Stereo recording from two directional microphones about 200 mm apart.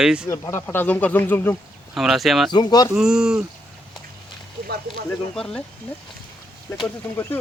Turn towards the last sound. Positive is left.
turn(degrees=15)  # may be behind; listen again after turning